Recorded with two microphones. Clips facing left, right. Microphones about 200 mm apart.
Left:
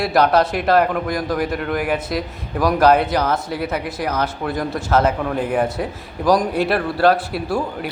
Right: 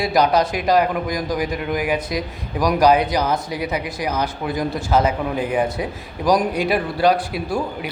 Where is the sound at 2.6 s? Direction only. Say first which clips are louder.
Left 1 dB; 15° right (ahead or behind).